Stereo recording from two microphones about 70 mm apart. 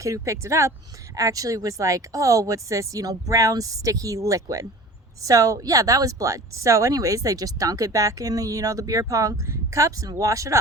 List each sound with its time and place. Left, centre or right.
0.0 s speech: right
1.1 s speech: right